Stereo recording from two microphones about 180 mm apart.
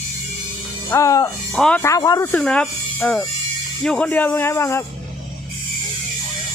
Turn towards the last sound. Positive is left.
turn(degrees=15)  # may be behind; listen again after turning